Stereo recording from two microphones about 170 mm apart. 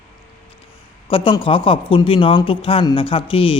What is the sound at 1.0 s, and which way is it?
A man's voice, 30° left (ahead or behind).